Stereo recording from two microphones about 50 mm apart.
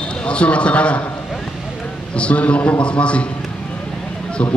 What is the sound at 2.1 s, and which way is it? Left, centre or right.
A man's voice, left.